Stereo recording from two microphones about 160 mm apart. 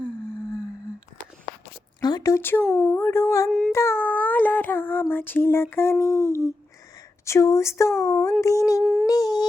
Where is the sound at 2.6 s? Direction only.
5° left (ahead or behind).